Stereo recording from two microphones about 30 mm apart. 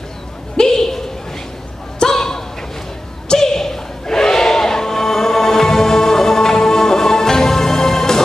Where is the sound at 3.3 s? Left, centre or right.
Centre.